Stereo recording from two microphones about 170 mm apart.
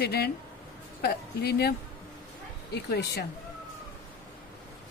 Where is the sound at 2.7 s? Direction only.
70° left (ahead or behind).